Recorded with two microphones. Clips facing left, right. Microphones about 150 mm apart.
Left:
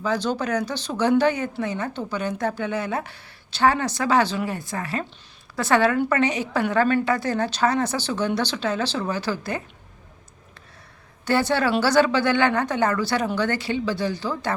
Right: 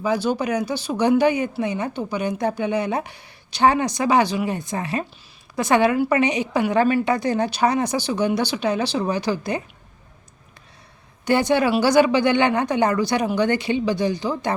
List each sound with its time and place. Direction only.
0.0 s speech: 10° right (ahead or behind)
11.3 s speech: 15° right (ahead or behind)